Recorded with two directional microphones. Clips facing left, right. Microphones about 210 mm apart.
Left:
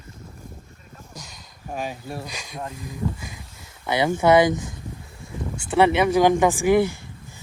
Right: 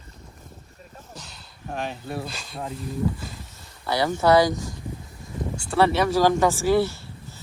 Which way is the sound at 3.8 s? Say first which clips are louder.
Left 2 dB; 20° left (ahead or behind).